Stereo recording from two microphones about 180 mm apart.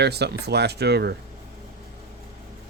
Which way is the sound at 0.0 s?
65° right (ahead or behind).